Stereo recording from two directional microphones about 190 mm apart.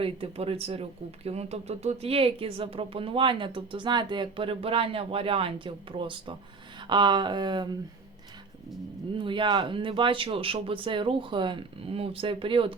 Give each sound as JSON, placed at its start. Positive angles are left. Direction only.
{"t": 0.0, "sound": "speech", "side_deg": -30}
{"t": 9.1, "sound": "speech", "side_deg": -25}